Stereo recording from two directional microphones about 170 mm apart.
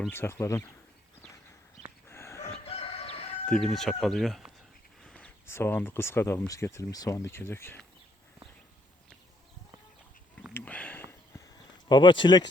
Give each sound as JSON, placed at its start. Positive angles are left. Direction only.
{"t": 0.1, "sound": "speech", "side_deg": 15}
{"t": 2.0, "sound": "chicken", "side_deg": 15}
{"t": 2.6, "sound": "fowl", "side_deg": 35}
{"t": 3.4, "sound": "speech", "side_deg": 5}
{"t": 10.5, "sound": "a sound", "side_deg": 10}
{"t": 11.9, "sound": "speech", "side_deg": 25}